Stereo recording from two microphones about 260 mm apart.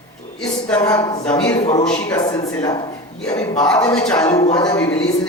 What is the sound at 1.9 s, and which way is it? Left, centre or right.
Speech, centre.